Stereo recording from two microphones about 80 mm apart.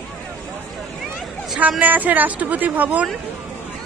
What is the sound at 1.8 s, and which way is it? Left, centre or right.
Speech, right.